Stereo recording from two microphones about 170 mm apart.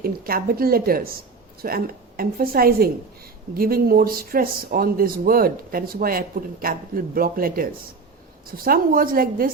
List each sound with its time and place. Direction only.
0.0 s speech: 60° right (ahead or behind)